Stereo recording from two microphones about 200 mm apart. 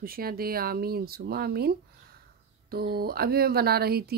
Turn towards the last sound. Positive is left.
turn(degrees=-50)  # may be behind; listen again after turning